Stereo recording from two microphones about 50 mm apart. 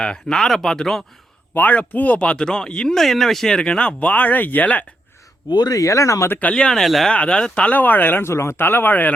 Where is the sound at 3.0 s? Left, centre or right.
Centre; by 4.9 s left.